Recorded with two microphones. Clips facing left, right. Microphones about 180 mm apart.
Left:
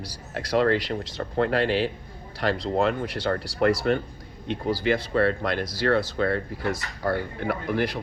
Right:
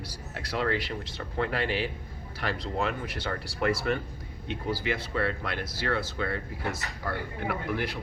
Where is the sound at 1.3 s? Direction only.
90° left.